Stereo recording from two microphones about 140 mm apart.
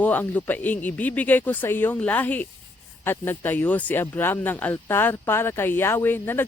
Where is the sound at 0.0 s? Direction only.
10° left (ahead or behind).